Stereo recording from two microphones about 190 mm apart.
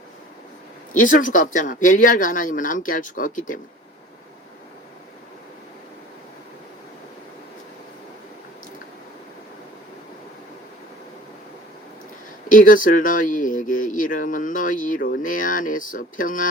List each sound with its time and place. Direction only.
0.9 s speech: 45° left (ahead or behind)
12.5 s speech: 45° left (ahead or behind)